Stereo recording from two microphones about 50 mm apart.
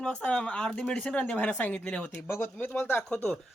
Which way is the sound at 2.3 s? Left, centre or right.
Left.